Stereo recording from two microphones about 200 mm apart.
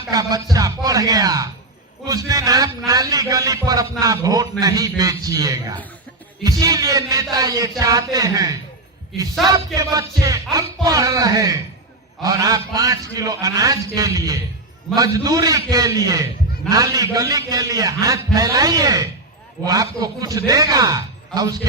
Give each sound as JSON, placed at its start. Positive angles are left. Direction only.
{"t": 0.1, "sound": "a man's voice", "side_deg": -15}
{"t": 9.7, "sound": "a man's voice", "side_deg": -15}